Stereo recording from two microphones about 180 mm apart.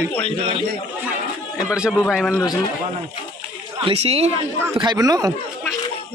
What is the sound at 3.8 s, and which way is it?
Speech, 35° right (ahead or behind).